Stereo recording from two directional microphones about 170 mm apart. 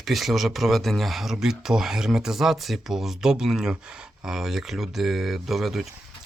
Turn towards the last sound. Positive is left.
turn(degrees=0)  # may be behind; listen again after turning